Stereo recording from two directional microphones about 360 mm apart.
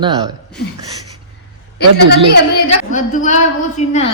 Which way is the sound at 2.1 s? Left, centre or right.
Left.